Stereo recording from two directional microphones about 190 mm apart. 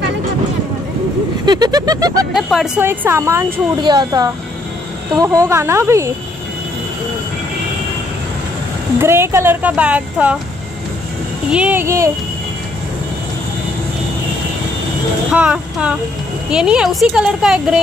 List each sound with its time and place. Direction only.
1.4 s vehicle: 20° right (ahead or behind)
2.3 s speech: centre (ahead or behind)
8.9 s speech: 15° right (ahead or behind)
11.5 s speech: 10° right (ahead or behind)
15.3 s a woman's voice: 5° right (ahead or behind)